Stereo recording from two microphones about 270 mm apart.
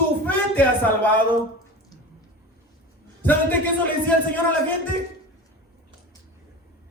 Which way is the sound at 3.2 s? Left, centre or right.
Centre.